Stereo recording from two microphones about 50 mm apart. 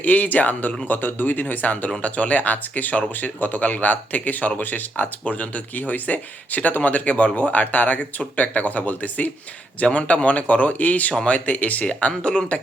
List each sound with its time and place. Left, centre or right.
0.0 s speech: left